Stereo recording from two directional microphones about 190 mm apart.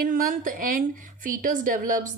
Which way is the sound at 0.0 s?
45° right (ahead or behind).